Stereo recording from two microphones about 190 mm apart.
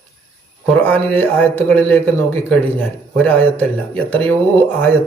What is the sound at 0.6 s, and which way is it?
Speech, 5° left (ahead or behind).